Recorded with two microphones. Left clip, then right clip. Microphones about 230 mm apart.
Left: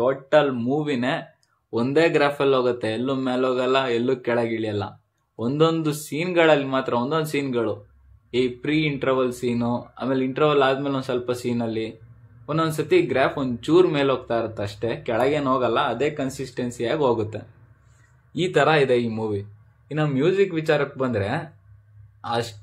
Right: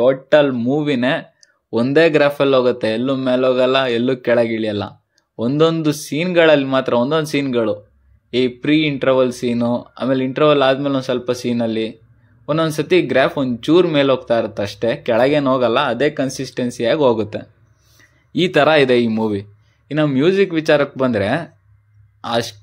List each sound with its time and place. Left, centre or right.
0.0 s a man's voice: right